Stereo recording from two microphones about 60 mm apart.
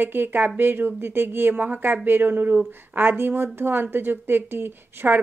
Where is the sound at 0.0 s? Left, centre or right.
Right.